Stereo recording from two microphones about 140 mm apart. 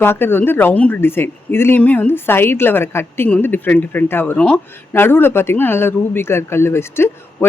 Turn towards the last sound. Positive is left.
turn(degrees=15)  # may be behind; listen again after turning